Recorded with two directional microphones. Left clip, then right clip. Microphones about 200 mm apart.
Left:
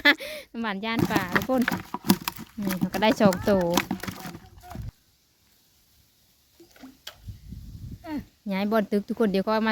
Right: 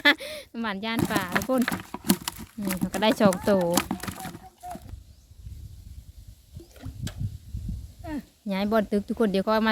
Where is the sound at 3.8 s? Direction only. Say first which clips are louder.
Even; 15° left (ahead or behind).